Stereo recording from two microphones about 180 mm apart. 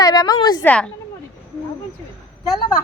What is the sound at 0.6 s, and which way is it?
Speech, 10° left (ahead or behind).